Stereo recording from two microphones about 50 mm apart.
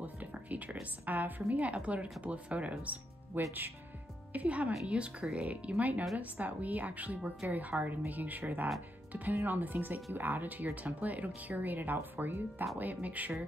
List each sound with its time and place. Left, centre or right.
0.0 s music: right
1.0 s speech: right
3.3 s speech: right
4.3 s speech: right